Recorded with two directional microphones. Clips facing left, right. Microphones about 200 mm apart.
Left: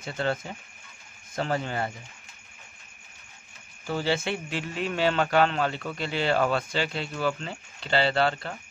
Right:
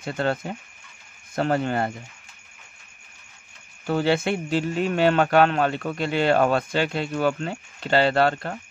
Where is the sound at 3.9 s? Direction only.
60° right (ahead or behind).